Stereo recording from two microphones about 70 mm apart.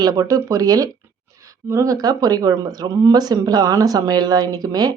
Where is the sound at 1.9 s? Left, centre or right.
Right.